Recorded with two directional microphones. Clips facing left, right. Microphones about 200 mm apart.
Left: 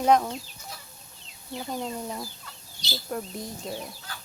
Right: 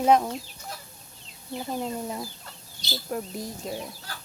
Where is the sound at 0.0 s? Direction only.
5° right (ahead or behind).